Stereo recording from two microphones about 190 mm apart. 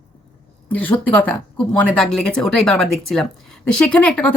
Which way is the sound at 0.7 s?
10° left (ahead or behind).